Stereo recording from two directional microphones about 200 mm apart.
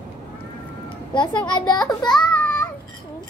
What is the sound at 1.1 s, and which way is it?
Speech, 25° left (ahead or behind).